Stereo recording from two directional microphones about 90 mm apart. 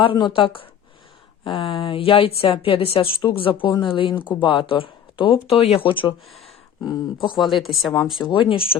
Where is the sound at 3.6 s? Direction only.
65° left (ahead or behind).